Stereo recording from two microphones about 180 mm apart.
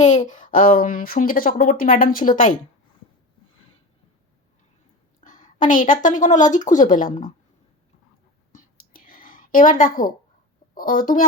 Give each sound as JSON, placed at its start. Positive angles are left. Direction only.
{"t": 0.0, "sound": "speech", "side_deg": 40}
{"t": 5.2, "sound": "a woman's voice", "side_deg": 45}
{"t": 8.5, "sound": "whispering", "side_deg": 50}
{"t": 10.8, "sound": "speech", "side_deg": 50}